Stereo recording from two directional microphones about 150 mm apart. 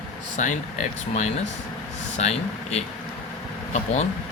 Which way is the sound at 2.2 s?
45° left (ahead or behind).